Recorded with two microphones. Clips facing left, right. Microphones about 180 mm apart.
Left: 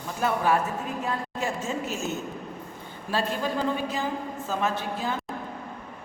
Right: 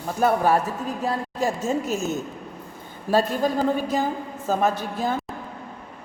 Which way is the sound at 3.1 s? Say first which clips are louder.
Right 6 dB; 40° right (ahead or behind).